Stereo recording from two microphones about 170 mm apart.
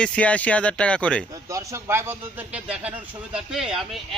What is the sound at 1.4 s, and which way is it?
Speech, 20° right (ahead or behind).